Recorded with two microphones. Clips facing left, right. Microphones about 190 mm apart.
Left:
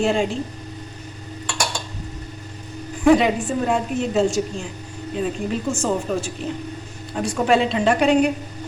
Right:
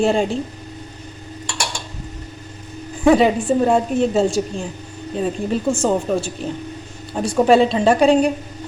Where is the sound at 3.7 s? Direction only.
35° right (ahead or behind).